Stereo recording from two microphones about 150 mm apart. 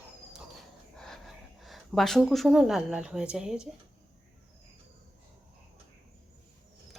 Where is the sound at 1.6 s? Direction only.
Centre (ahead or behind).